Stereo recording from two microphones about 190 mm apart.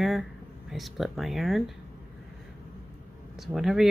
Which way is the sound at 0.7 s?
Centre (ahead or behind).